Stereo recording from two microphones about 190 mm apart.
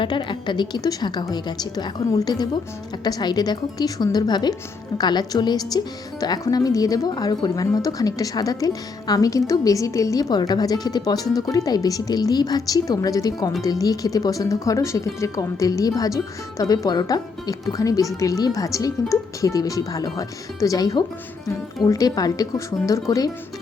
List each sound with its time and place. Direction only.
0.0 s speech: 25° left (ahead or behind)